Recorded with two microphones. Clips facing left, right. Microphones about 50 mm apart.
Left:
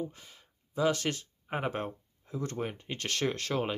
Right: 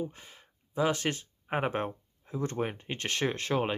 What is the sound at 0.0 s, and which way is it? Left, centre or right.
Speech, right.